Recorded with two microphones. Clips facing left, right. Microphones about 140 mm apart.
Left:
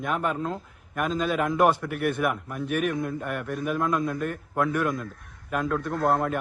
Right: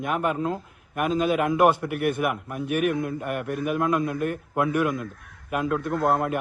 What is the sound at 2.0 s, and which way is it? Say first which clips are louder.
Speech: right 2 dB; 50° right (ahead or behind).